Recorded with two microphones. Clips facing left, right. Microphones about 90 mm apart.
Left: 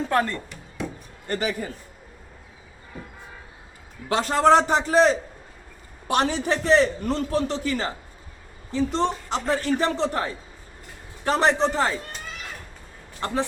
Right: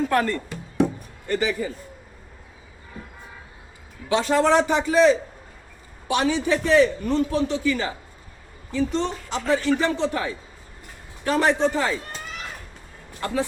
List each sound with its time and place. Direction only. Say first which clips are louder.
0.1 s a man's voice: left 3 dB; 25° left (ahead or behind)
1.3 s a man's voice: right 3 dB; 50° left (ahead or behind)
4.1 s a man's voice: left 1 dB; 45° left (ahead or behind)
13.1 s speech: right 1 dB; 30° left (ahead or behind)